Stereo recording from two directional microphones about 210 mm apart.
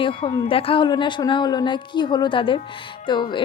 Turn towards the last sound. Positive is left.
turn(degrees=20)  # may be behind; listen again after turning